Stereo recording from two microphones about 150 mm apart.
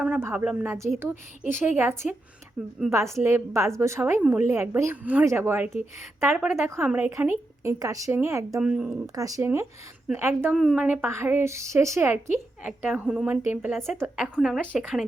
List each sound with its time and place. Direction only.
0.2 s a woman's voice: 10° right (ahead or behind)
2.6 s a woman's voice: 5° right (ahead or behind)
2.9 s a woman's voice: 20° right (ahead or behind)
8.6 s a woman's voice: 5° right (ahead or behind)
9.1 s a woman's voice: 25° right (ahead or behind)
10.5 s a woman's voice: centre (ahead or behind)
10.8 s a woman's voice: 15° right (ahead or behind)
12.9 s a woman's voice: 5° right (ahead or behind)
14.2 s a woman's voice: centre (ahead or behind)